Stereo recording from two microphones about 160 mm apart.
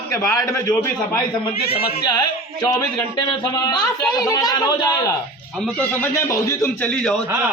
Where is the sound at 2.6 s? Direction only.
25° left (ahead or behind); by 7.2 s 5° left (ahead or behind).